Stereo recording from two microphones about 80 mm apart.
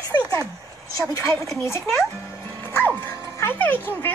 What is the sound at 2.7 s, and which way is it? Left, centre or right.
Dog, left.